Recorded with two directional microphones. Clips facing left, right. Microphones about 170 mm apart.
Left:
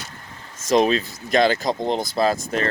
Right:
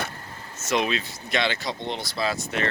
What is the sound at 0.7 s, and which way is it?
Speech, 35° left (ahead or behind).